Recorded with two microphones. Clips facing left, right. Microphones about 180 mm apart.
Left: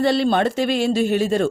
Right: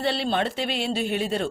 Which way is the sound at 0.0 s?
45° left (ahead or behind).